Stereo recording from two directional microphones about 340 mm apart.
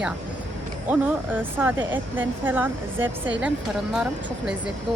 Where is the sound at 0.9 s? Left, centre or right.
Centre.